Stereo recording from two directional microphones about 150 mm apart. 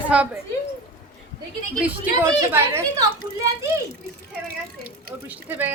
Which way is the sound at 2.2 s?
15° right (ahead or behind).